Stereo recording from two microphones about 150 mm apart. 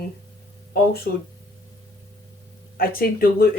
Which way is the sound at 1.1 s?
90° left.